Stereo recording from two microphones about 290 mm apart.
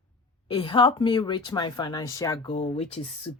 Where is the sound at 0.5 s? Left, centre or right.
Centre.